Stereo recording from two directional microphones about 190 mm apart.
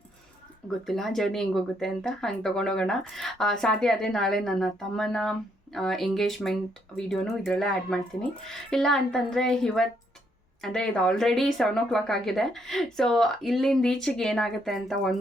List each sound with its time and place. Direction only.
0.9 s a woman's voice: centre (ahead or behind)